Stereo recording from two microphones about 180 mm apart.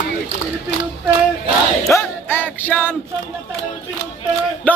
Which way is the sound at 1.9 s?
15° left (ahead or behind).